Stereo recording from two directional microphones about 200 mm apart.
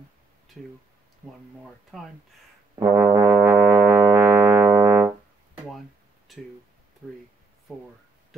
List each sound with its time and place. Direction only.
1.9 s speech: centre (ahead or behind)
2.7 s brass instrument: 15° right (ahead or behind)
3.3 s music: 10° right (ahead or behind)
5.0 s music: centre (ahead or behind)
6.3 s speech: centre (ahead or behind)